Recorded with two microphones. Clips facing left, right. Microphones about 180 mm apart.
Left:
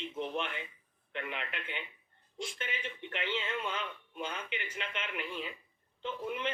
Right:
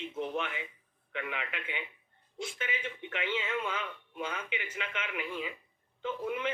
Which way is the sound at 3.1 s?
5° right (ahead or behind).